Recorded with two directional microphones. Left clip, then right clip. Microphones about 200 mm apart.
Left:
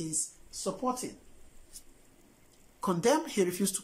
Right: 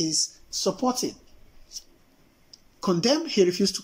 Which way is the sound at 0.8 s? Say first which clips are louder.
Right 5 dB; 15° right (ahead or behind).